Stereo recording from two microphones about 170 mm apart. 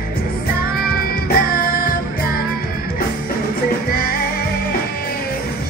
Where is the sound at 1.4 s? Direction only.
60° left (ahead or behind).